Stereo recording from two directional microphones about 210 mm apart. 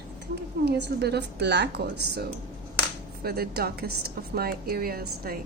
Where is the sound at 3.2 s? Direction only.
50° right (ahead or behind).